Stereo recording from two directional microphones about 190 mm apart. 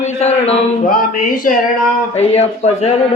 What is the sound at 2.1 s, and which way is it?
Speech, 35° left (ahead or behind).